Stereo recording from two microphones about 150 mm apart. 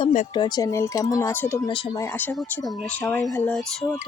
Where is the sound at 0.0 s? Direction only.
45° left (ahead or behind).